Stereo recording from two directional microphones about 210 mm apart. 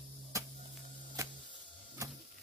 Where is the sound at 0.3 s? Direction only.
15° right (ahead or behind).